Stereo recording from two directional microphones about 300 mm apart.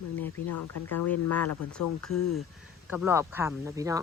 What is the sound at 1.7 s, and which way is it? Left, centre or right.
Speech, centre.